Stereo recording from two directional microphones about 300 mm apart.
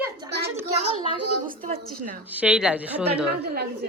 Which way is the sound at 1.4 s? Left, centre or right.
Right.